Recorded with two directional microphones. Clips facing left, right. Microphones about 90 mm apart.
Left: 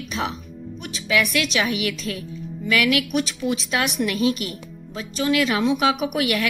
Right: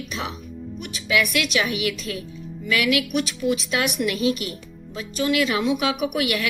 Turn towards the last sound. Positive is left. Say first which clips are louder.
# left 1 dB
turn(degrees=35)  # may be behind; listen again after turning